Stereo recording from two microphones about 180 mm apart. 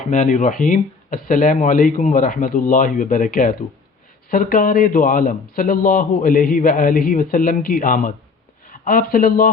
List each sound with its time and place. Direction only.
0.0 s a man's voice: 45° left (ahead or behind)